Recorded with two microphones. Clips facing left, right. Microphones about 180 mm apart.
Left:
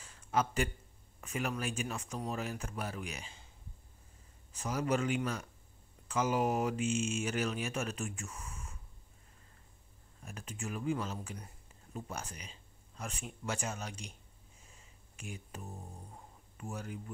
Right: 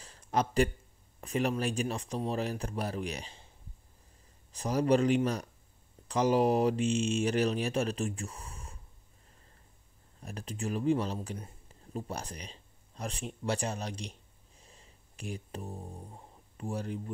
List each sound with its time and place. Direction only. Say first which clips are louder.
0.0 s a sound: right 2 dB; 35° right (ahead or behind)
1.2 s speech: right 6 dB; 35° right (ahead or behind)
4.5 s speech: right 7 dB; 35° right (ahead or behind)
10.2 s speech: right 6 dB; 35° right (ahead or behind)
14.6 s a sound: right 5 dB; 35° right (ahead or behind)
16.5 s speech: right 6 dB; 35° right (ahead or behind)